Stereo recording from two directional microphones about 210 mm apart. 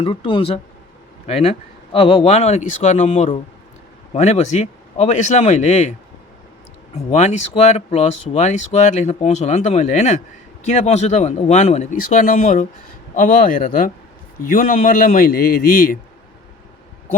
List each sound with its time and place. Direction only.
0.0 s speech: 25° left (ahead or behind)
1.9 s speech: 25° left (ahead or behind)
6.9 s a man's voice: 30° left (ahead or behind)